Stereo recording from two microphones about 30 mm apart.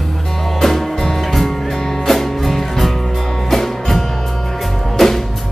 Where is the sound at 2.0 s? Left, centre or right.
Centre.